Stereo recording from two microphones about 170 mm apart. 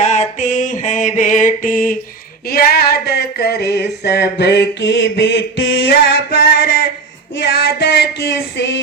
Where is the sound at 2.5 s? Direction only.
65° left (ahead or behind); by 5.4 s 90° left.